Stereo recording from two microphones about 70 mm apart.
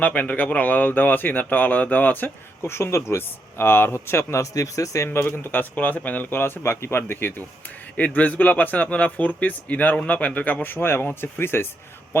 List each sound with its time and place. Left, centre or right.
0.0 s speech: left
4.5 s speech: left
5.0 s speech: left